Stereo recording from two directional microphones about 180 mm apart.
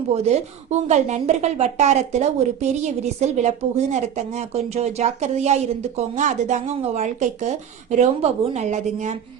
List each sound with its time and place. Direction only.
0.1 s a woman's voice: 35° right (ahead or behind)